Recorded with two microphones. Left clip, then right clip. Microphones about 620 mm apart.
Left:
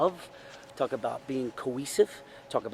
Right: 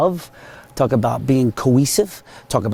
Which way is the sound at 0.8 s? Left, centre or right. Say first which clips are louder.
Right 13 dB; right.